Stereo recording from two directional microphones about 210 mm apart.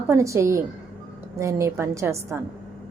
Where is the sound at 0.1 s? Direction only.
15° right (ahead or behind).